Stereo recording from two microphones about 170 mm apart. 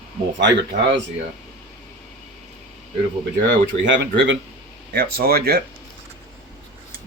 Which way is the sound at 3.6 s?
90° right.